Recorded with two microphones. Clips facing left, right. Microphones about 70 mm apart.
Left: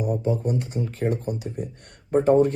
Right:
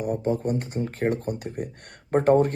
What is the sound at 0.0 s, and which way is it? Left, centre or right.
Speech, right.